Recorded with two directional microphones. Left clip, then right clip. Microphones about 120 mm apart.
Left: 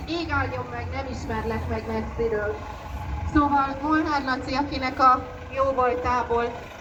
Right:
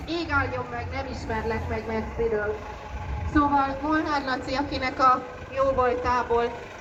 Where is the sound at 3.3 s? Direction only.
15° left (ahead or behind).